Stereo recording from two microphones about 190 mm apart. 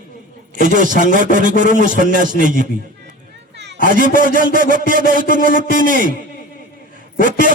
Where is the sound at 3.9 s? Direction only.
45° right (ahead or behind).